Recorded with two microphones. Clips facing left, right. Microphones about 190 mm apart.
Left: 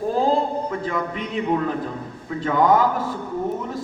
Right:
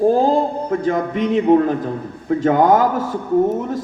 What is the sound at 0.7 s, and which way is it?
A man's voice, 45° right (ahead or behind).